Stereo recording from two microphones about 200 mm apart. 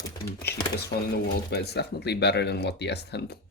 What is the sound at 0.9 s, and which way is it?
Speech, 55° left (ahead or behind).